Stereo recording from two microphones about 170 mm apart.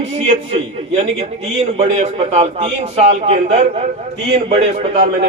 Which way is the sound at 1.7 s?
40° right (ahead or behind).